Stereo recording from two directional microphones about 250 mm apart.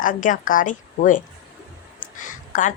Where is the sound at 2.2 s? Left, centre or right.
Left.